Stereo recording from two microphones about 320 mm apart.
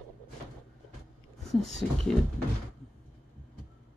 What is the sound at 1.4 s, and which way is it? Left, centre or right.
Speech, centre.